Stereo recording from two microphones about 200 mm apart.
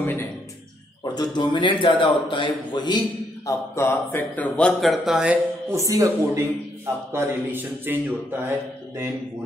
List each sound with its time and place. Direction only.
0.0 s a sound: 10° left (ahead or behind)
1.1 s speech: 20° left (ahead or behind); by 5.4 s centre (ahead or behind)
5.7 s speech: 15° right (ahead or behind)